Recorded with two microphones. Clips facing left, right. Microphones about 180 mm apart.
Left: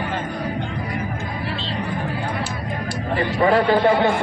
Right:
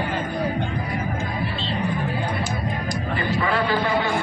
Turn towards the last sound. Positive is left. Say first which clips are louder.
# left 7 dB
turn(degrees=40)  # may be behind; listen again after turning